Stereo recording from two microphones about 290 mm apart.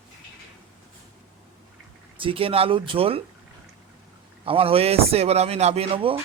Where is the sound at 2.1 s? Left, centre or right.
Centre.